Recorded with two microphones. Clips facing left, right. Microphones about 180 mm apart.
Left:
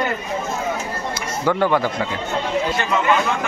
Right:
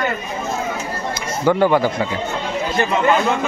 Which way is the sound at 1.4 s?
5° right (ahead or behind).